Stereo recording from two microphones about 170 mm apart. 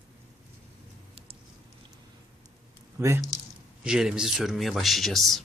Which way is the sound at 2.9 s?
15° right (ahead or behind).